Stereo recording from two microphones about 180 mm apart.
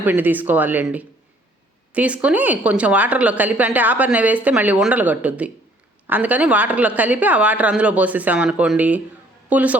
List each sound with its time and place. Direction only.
0.0 s speech: 10° right (ahead or behind)